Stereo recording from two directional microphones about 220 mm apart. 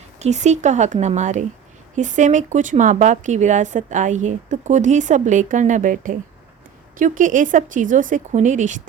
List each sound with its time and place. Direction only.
0.2 s speech: 30° right (ahead or behind)